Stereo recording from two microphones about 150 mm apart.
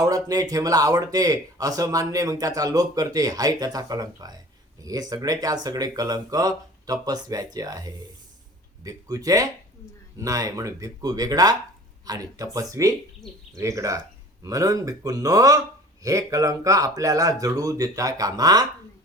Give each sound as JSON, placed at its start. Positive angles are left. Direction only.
{"t": 0.0, "sound": "speech", "side_deg": -25}